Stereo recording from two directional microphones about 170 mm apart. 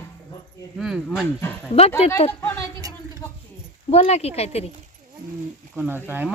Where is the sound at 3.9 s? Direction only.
35° left (ahead or behind).